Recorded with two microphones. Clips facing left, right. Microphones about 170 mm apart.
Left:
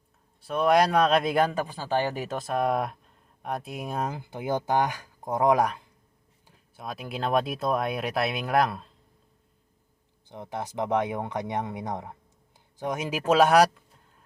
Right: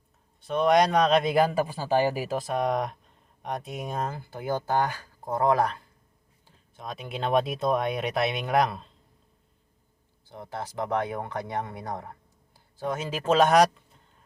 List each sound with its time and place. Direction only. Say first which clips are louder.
0.4 s a man's voice: even; 5° left (ahead or behind)
6.7 s a man's voice: left 1 dB; 5° left (ahead or behind)
10.2 s speech: left 2 dB; 20° left (ahead or behind)